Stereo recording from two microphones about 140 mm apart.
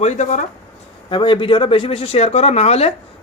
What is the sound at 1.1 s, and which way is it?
A man's voice, 35° left (ahead or behind).